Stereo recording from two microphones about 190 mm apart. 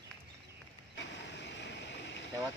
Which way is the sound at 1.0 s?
65° left (ahead or behind).